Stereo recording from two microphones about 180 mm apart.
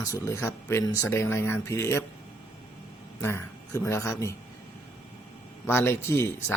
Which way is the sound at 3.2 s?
15° left (ahead or behind).